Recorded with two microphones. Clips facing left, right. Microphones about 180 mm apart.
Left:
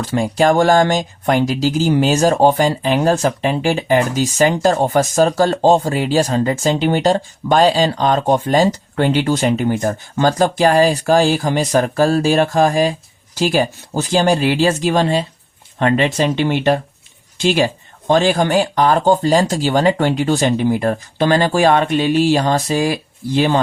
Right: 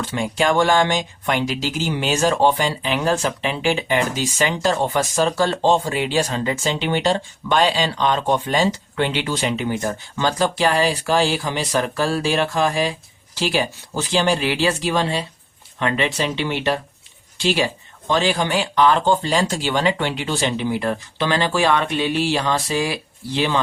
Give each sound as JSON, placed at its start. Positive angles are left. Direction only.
{"t": 0.0, "sound": "speech", "side_deg": 40}